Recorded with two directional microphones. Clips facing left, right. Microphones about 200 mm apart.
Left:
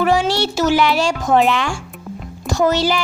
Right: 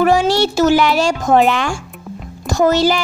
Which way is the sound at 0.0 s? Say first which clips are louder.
Right 3 dB; 45° right (ahead or behind).